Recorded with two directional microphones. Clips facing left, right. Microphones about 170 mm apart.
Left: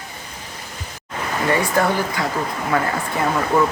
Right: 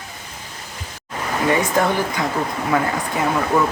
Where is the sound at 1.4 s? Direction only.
20° right (ahead or behind).